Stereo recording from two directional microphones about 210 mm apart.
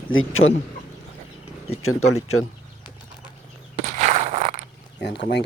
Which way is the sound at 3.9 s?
35° right (ahead or behind).